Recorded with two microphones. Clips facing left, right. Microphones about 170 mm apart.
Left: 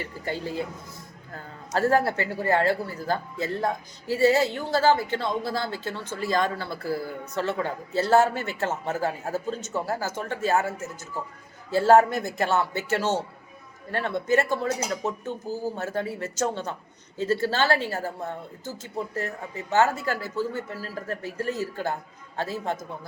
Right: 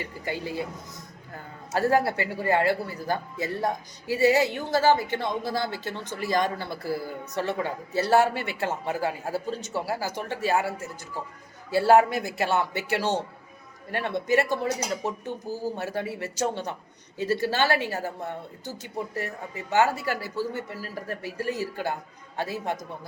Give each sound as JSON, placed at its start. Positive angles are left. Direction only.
{"t": 0.0, "sound": "speech", "side_deg": -15}
{"t": 11.7, "sound": "speech", "side_deg": -15}